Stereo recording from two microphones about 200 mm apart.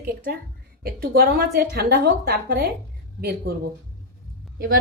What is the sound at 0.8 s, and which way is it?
A woman's voice, 50° right (ahead or behind).